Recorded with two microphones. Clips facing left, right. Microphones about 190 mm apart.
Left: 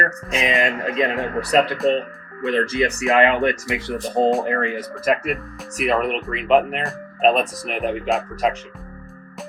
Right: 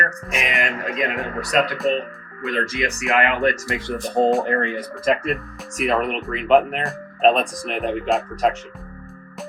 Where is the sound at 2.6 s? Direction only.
30° left (ahead or behind).